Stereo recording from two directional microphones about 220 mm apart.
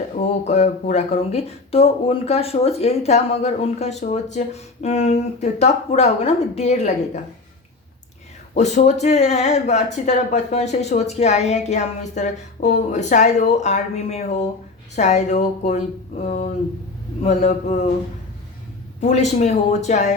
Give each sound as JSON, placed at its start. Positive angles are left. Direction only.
{"t": 0.2, "sound": "speech", "side_deg": 30}
{"t": 8.5, "sound": "speech", "side_deg": 30}
{"t": 17.2, "sound": "speech", "side_deg": 30}
{"t": 18.9, "sound": "speech", "side_deg": 30}